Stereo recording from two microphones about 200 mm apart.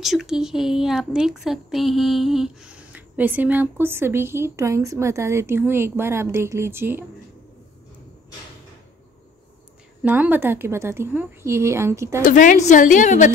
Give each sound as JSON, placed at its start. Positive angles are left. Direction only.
{"t": 0.0, "sound": "speech", "side_deg": 0}
{"t": 10.0, "sound": "speech", "side_deg": -10}
{"t": 12.2, "sound": "a woman's voice", "side_deg": 40}